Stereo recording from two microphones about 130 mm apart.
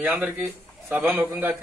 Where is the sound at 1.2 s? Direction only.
15° right (ahead or behind).